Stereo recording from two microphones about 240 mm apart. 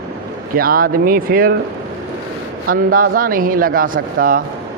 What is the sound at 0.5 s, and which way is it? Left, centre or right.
A man's voice, right.